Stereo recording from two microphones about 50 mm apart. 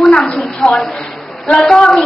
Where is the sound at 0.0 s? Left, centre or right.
Left.